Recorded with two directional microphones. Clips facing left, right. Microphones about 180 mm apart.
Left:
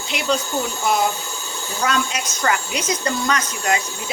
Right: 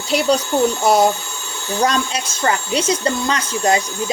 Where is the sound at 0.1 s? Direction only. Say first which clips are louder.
Right 6 dB; 35° right (ahead or behind).